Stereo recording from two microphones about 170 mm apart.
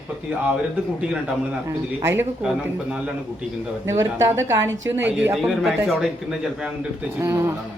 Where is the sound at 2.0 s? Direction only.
15° right (ahead or behind).